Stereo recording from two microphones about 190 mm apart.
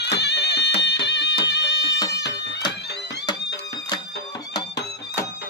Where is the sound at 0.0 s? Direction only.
60° left (ahead or behind).